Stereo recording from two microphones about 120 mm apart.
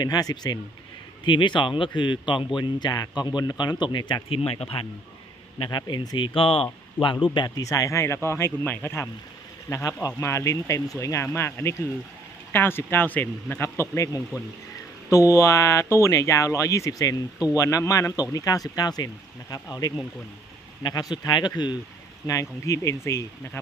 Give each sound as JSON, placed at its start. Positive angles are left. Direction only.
{"t": 0.0, "sound": "a man's voice", "side_deg": 35}
{"t": 4.4, "sound": "speech", "side_deg": 55}
{"t": 5.6, "sound": "speech", "side_deg": 40}
{"t": 7.3, "sound": "a man's voice", "side_deg": 35}